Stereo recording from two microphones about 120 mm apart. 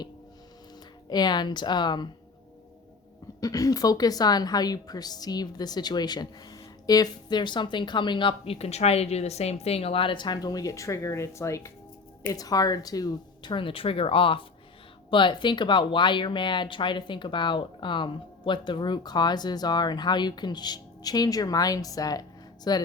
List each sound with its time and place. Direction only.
1.1 s a woman's voice: 35° left (ahead or behind)
3.4 s a woman's voice: 30° left (ahead or behind)